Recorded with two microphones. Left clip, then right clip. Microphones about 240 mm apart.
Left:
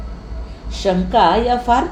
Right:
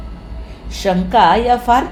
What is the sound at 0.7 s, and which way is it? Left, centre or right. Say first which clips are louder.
Speech: right 2 dB; right.